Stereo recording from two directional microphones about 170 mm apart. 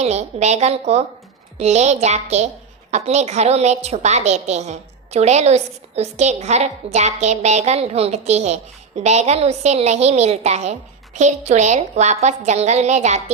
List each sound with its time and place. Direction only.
0.0 s a woman's voice: 40° right (ahead or behind)